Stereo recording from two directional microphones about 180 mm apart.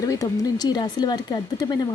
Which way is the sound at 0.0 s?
20° left (ahead or behind).